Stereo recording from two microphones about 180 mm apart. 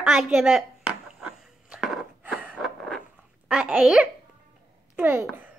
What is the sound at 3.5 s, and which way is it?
A child's voice, 5° right (ahead or behind).